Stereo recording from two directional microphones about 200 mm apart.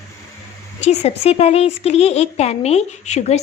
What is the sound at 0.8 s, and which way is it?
Speech, 35° left (ahead or behind).